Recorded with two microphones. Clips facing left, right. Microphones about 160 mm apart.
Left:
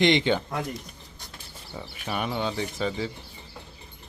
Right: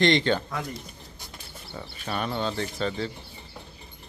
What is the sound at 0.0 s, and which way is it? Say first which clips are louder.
Speech: even; 15° left (ahead or behind).